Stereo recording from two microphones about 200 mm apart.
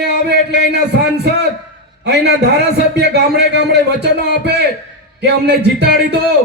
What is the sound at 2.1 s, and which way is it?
A man's voice, 55° right (ahead or behind).